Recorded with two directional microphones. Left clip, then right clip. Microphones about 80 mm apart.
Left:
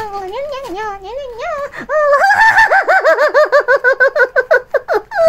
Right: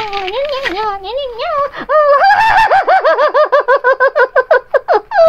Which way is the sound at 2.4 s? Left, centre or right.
Left.